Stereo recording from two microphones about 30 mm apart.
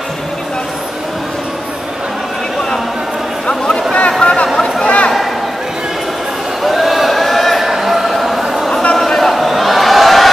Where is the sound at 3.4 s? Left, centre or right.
Left.